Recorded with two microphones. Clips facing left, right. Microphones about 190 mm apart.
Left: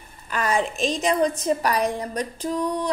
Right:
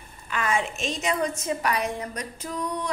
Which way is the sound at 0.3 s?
40° left (ahead or behind).